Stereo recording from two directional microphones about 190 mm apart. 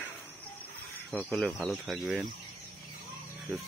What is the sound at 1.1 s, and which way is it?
Speech, 5° left (ahead or behind).